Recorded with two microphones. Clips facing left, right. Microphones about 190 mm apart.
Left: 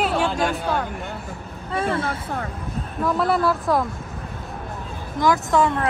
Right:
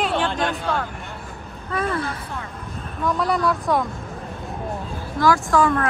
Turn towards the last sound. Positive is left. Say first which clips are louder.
# right 1 dB
turn(degrees=20)  # may be behind; listen again after turning